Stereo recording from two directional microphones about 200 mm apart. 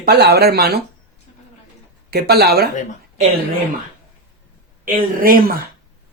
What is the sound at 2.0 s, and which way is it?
Speech, 55° right (ahead or behind).